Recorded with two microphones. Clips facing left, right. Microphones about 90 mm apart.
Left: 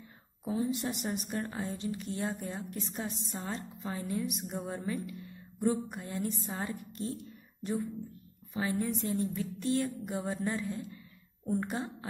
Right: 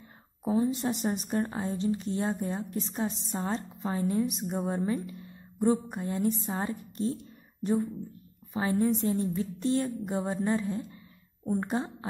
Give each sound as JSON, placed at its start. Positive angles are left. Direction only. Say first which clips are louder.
{"t": 0.5, "sound": "a woman's voice", "louder": "right 5 dB", "side_deg": -35}